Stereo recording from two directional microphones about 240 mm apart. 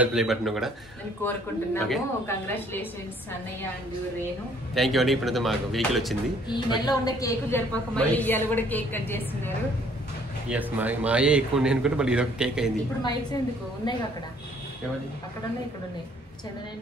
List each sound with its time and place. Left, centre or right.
0.0 s a man's voice: centre
4.7 s a man's voice: centre
6.5 s a woman's voice: centre
10.5 s a man's voice: centre
13.0 s a woman's voice: centre